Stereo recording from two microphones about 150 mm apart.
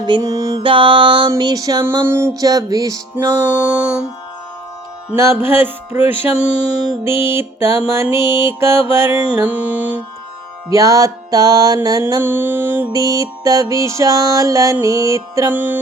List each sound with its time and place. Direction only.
0.0 s music: 25° right (ahead or behind)
0.6 s music: 35° right (ahead or behind)
3.5 s music: 10° right (ahead or behind)
5.2 s music: 15° right (ahead or behind)
10.7 s music: 20° right (ahead or behind)